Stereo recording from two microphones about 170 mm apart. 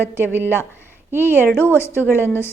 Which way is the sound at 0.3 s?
10° right (ahead or behind).